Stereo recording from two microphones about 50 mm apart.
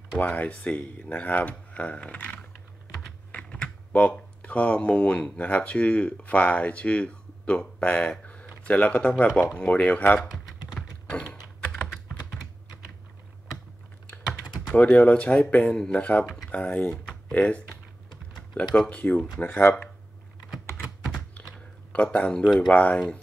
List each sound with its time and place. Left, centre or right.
0.2 s speech: left
3.3 s typing: left
4.4 s speech: left
8.2 s a sound: left
8.6 s speech: left
10.1 s typing: centre
11.6 s computer keyboard: left
14.8 s speech: left
19.4 s speech: left
21.4 s computer keyboard: left
22.7 s speech: left